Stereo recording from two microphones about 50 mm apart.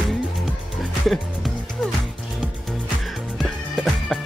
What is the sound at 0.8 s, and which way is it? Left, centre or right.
Music, centre.